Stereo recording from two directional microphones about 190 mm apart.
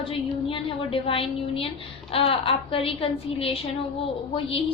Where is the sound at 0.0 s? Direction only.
30° left (ahead or behind).